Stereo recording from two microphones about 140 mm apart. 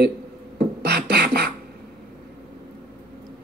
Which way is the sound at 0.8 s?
90° right.